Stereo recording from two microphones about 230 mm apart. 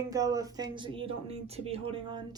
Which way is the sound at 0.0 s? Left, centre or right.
Centre.